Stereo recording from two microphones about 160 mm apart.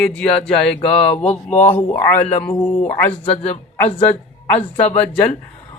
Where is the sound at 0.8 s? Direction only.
40° left (ahead or behind).